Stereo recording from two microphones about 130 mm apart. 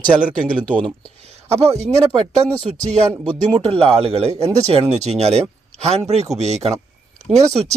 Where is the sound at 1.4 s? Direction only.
55° right (ahead or behind).